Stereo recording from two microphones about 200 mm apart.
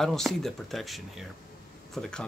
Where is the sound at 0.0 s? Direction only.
Centre (ahead or behind).